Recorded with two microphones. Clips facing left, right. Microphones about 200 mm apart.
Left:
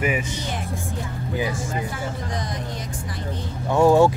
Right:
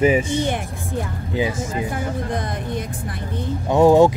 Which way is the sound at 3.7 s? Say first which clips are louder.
Right 3 dB; 20° right (ahead or behind).